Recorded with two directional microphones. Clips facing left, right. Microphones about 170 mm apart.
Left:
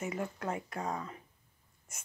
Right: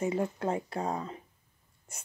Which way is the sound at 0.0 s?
30° right (ahead or behind).